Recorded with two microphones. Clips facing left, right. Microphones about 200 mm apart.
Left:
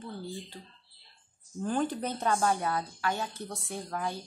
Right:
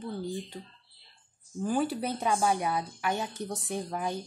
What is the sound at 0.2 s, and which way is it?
Speech, 15° right (ahead or behind).